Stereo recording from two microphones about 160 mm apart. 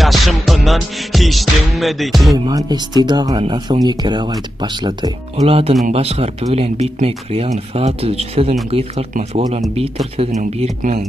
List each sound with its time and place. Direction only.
0.0 s music: centre (ahead or behind)
2.3 s speech: 25° right (ahead or behind)
5.4 s speech: 40° right (ahead or behind)